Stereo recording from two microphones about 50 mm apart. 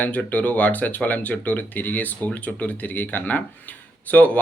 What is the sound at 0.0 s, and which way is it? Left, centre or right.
A man's voice, left.